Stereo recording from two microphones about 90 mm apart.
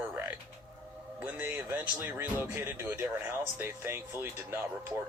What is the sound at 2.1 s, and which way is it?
Speech, 30° right (ahead or behind).